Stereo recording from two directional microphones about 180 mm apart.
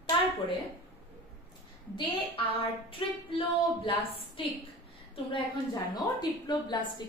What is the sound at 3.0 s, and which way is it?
A woman's voice, 30° left (ahead or behind).